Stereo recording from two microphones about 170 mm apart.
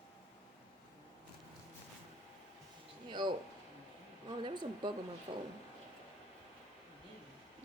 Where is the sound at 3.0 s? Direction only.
25° right (ahead or behind).